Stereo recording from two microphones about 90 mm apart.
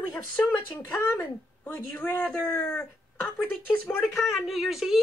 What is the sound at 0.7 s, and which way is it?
Speech, 25° left (ahead or behind).